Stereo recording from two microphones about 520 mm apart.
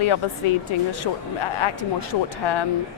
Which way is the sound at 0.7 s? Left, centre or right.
Left.